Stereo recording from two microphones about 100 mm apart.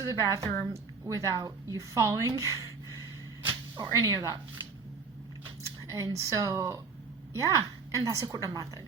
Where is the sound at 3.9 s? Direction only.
35° right (ahead or behind).